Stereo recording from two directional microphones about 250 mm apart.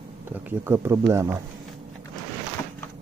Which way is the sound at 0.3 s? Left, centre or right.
Centre.